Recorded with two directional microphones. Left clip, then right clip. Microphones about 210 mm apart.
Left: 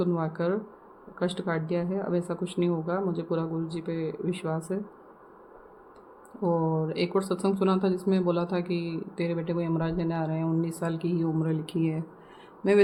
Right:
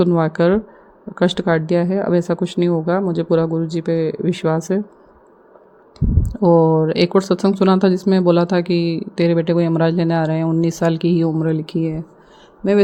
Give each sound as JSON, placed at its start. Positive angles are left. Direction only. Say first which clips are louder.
{"t": 0.0, "sound": "speech", "louder": "right 13 dB", "side_deg": -35}
{"t": 6.4, "sound": "speech", "louder": "right 14 dB", "side_deg": -35}